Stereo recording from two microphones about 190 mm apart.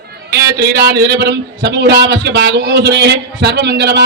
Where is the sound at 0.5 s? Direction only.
55° right (ahead or behind).